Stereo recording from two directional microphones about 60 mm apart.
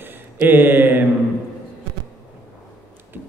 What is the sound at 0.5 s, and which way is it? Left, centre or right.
Speech, right.